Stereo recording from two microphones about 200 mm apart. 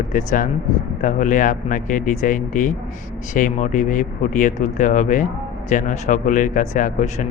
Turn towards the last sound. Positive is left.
turn(degrees=40)  # may be behind; listen again after turning